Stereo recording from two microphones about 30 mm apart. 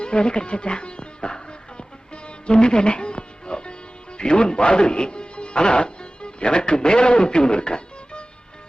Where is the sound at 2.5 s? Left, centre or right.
Left.